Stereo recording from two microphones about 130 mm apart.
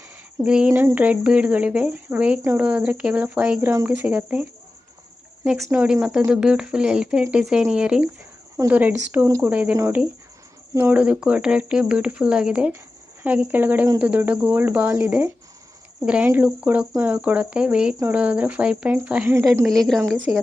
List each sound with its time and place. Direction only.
0.4 s speech: 10° right (ahead or behind)
5.5 s speech: centre (ahead or behind)
9.7 s speech: 20° right (ahead or behind)
19.6 s speech: centre (ahead or behind)